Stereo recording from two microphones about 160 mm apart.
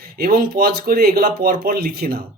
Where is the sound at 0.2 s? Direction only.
65° right (ahead or behind).